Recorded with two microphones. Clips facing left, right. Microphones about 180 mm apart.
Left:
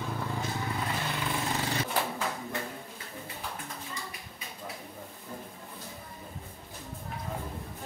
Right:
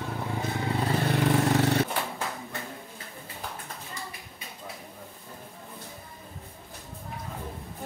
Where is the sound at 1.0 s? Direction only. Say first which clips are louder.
Right 9 dB; 55° right (ahead or behind).